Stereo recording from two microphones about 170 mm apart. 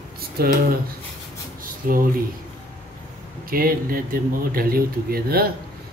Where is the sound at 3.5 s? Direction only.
60° right (ahead or behind).